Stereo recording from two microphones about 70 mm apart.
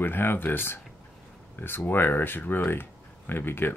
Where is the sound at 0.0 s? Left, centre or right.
Left.